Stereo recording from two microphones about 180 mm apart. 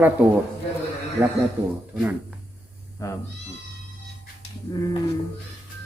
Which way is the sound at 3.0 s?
15° left (ahead or behind).